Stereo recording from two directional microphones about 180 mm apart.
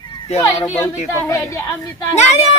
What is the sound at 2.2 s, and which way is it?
Speech, 40° left (ahead or behind).